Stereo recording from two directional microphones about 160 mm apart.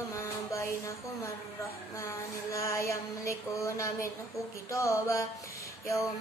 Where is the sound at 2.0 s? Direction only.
20° left (ahead or behind).